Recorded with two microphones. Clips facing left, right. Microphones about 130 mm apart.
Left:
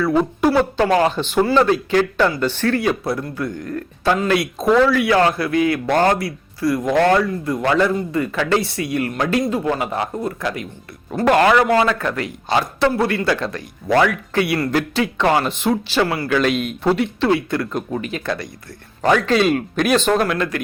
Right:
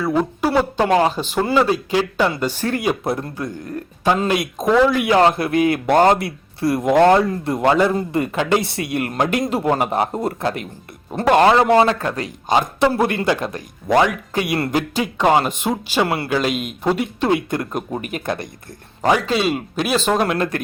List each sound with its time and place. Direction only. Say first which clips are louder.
0.2 s a woman's voice: left 1 dB; 5° right (ahead or behind)
1.1 s speech: left 2 dB; 40° right (ahead or behind)
1.5 s speech: even; 10° right (ahead or behind)
4.6 s a woman's voice: even; centre (ahead or behind)
4.9 s speech: right 1 dB; 20° right (ahead or behind)
9.3 s speech: left 1 dB; 30° right (ahead or behind)
12.5 s speech: right 1 dB; 15° right (ahead or behind)
14.4 s speech: right 1 dB; 35° right (ahead or behind)
14.7 s speech: left 1 dB; 15° right (ahead or behind)
16.0 s speech: even; 25° right (ahead or behind)
16.4 s speech: left 3 dB; 10° right (ahead or behind)
19.0 s speech: left 2 dB; 10° right (ahead or behind)
20.2 s speech: right 1 dB; 30° right (ahead or behind)